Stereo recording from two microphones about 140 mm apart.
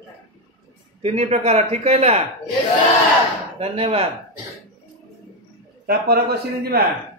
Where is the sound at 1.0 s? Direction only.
55° right (ahead or behind).